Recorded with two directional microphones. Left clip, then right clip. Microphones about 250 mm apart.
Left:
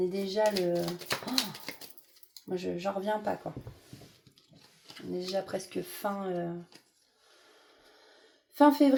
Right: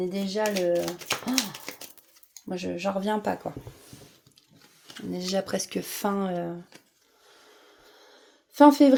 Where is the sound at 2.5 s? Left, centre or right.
Right.